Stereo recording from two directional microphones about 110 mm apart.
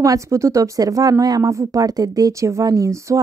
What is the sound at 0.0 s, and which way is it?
A woman's voice, 30° right (ahead or behind).